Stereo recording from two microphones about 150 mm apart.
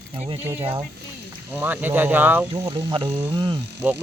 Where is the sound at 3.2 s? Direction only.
25° right (ahead or behind).